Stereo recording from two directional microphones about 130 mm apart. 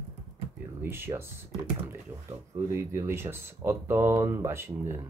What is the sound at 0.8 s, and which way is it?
Speech, 20° right (ahead or behind).